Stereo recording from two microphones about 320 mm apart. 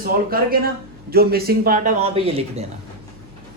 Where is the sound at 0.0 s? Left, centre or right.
Right.